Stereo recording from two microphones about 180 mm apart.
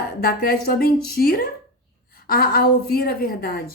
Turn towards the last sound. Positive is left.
turn(degrees=55)  # may be behind; listen again after turning